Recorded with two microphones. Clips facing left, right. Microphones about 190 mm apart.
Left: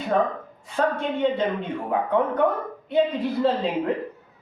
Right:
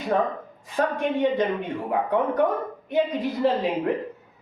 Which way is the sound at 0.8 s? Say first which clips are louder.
Even; 15° right (ahead or behind).